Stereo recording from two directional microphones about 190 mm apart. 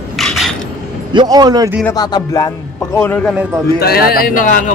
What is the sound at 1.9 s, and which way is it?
Music, 20° left (ahead or behind).